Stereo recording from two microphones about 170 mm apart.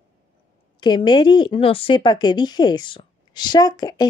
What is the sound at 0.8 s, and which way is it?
Speech, 25° left (ahead or behind).